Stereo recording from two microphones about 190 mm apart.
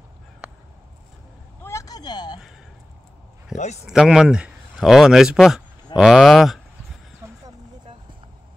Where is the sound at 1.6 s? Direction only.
15° left (ahead or behind).